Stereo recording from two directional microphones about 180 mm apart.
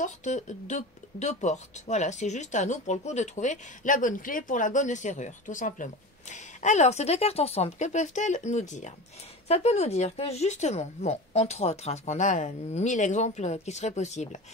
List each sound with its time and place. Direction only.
0.0 s speech: 40° left (ahead or behind)